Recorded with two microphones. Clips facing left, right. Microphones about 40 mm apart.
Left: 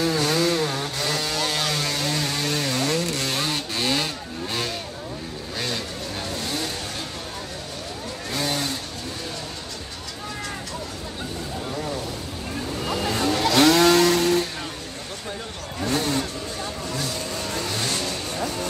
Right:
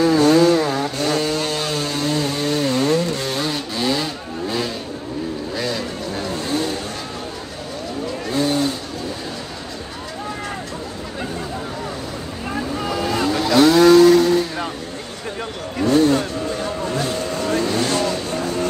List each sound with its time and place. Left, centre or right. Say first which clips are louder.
0.0 s chainsaw: right 8 dB; right
1.5 s vehicle: right 2 dB; left
2.0 s chainsaw: right 5 dB; right
3.7 s vehicle: right 3 dB; left
6.2 s vehicle: right 7 dB; right
8.3 s vehicle: right 7 dB; right
12.7 s vehicle: right 3 dB; right
13.7 s a sound: right 8 dB; right
15.8 s vehicle: right 9 dB; right